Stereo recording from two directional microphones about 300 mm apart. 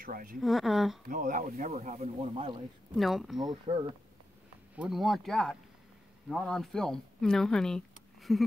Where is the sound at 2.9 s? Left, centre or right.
Centre.